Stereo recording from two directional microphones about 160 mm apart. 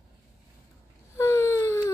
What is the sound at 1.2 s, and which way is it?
Wail, 15° left (ahead or behind).